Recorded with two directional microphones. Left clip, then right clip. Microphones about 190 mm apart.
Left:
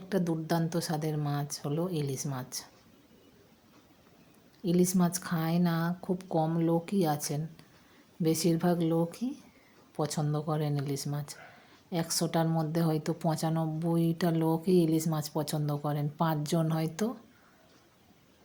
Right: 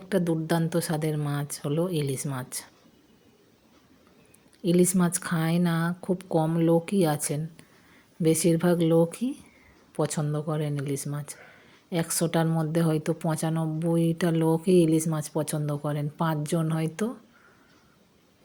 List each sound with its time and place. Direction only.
0.1 s a woman's voice: 15° right (ahead or behind)
4.6 s a woman's voice: 15° right (ahead or behind)